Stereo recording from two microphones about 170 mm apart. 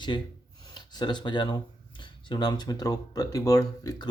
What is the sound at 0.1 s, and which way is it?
Speech, 30° left (ahead or behind).